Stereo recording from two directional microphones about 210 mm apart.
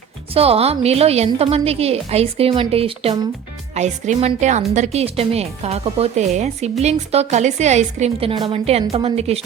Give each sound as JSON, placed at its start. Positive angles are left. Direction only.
{"t": 0.3, "sound": "speech", "side_deg": -30}